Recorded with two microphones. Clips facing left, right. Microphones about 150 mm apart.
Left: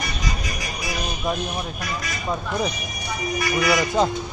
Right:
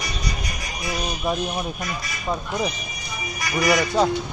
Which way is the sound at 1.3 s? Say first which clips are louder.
Right 1 dB; 5° right (ahead or behind).